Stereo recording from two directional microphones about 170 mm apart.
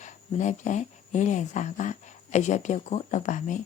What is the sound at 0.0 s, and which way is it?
Speech, 45° left (ahead or behind).